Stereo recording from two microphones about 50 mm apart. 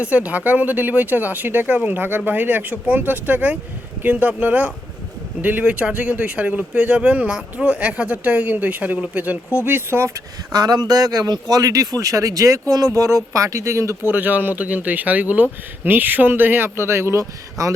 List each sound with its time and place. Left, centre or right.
0.0 s speech: right
9.6 s speech: right
11.7 s speech: right
14.0 s speech: right